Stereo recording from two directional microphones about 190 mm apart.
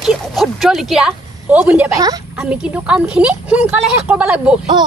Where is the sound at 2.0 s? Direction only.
20° right (ahead or behind).